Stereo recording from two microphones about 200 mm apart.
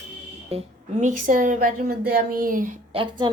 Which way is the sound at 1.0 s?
40° right (ahead or behind).